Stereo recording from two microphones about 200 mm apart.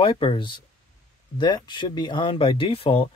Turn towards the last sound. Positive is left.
turn(degrees=30)  # may be behind; listen again after turning